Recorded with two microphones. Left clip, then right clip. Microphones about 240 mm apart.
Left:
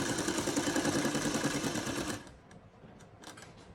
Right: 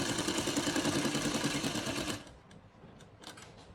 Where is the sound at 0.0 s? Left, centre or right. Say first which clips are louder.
Even; centre.